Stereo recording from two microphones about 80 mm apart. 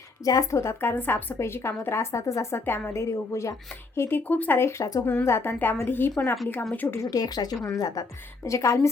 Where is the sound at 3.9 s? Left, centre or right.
Left.